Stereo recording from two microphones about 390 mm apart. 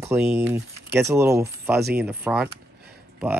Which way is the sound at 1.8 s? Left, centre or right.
Right.